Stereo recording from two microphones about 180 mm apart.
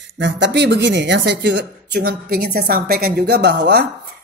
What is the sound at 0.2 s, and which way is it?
Speech, 75° right (ahead or behind).